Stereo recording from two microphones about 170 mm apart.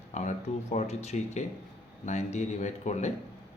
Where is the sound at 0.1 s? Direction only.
45° left (ahead or behind).